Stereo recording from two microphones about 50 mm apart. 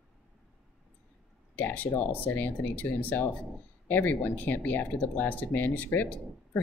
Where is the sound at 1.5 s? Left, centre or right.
Left.